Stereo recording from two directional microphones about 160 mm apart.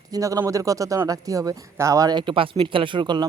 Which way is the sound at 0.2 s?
20° right (ahead or behind).